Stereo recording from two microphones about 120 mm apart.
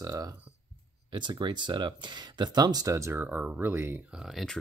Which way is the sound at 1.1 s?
40° right (ahead or behind).